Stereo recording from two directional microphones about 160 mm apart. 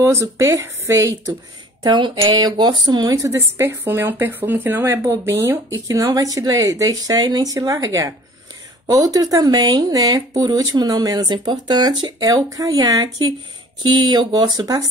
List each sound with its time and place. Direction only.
0.0 s speech: 15° right (ahead or behind)